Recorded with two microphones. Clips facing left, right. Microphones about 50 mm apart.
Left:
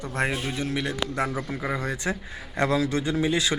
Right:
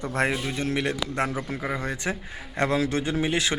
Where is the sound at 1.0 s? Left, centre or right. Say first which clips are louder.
Left 1 dB; left.